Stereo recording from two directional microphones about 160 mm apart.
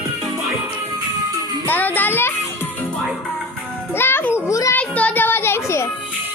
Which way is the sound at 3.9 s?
15° left (ahead or behind).